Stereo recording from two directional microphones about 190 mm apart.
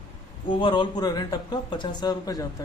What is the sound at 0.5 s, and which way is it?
Speech, 25° left (ahead or behind).